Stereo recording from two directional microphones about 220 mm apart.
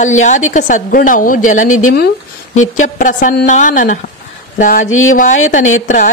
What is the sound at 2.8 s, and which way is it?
A woman's voice, 35° left (ahead or behind).